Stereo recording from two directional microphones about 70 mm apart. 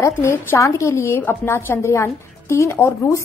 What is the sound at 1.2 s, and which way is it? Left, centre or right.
A woman's voice, left.